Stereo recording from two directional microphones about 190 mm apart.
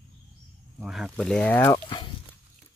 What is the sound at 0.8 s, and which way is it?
Speech, centre (ahead or behind).